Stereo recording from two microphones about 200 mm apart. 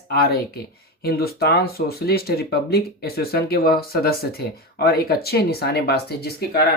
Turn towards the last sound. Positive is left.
turn(degrees=50)  # may be behind; listen again after turning